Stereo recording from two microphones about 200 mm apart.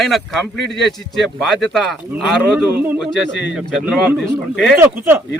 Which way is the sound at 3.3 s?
60° left (ahead or behind).